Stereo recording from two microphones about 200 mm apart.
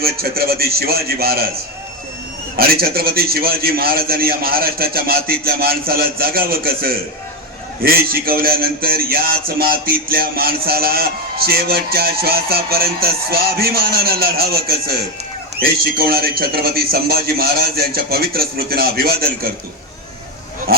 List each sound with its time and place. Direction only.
0.0 s a man's voice: 50° right (ahead or behind)
2.6 s a man's voice: 50° right (ahead or behind)